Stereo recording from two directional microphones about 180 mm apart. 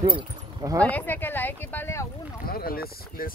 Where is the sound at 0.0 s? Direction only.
25° right (ahead or behind).